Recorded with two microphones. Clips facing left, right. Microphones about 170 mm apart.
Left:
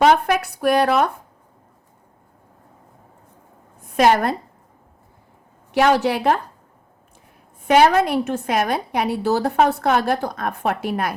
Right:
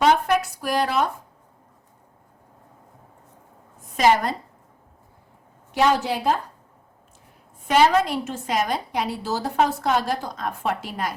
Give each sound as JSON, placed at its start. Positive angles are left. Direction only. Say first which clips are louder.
{"t": 0.0, "sound": "a woman's voice", "louder": "left 3 dB", "side_deg": 65}
{"t": 3.9, "sound": "a woman's voice", "louder": "left 3 dB", "side_deg": 60}
{"t": 5.7, "sound": "a woman's voice", "louder": "left 4 dB", "side_deg": 70}
{"t": 7.7, "sound": "a woman's voice", "louder": "left 3 dB", "side_deg": 60}